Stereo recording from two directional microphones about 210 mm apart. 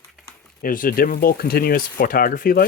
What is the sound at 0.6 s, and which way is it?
Speech, 40° left (ahead or behind).